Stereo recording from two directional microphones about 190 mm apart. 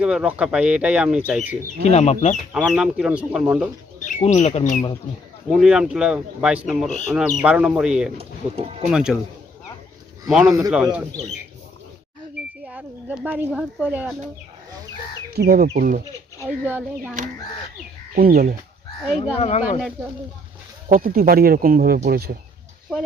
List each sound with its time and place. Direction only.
0.0 s speech: 5° right (ahead or behind)
1.8 s speech: 35° left (ahead or behind)
2.5 s speech: 5° right (ahead or behind)
4.0 s speech: 35° left (ahead or behind)
5.5 s speech: 5° right (ahead or behind)
8.2 s speech: 30° right (ahead or behind)
8.9 s speech: 5° right (ahead or behind)
10.2 s speech: centre (ahead or behind)
12.6 s speech: 5° right (ahead or behind)
15.4 s speech: 55° right (ahead or behind)
16.4 s speech: 10° right (ahead or behind)
18.1 s speech: 50° right (ahead or behind)
19.4 s speech: 35° left (ahead or behind)
20.9 s speech: 50° right (ahead or behind)